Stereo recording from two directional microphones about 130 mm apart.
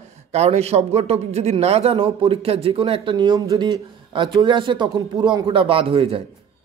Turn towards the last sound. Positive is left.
turn(degrees=-45)  # may be behind; listen again after turning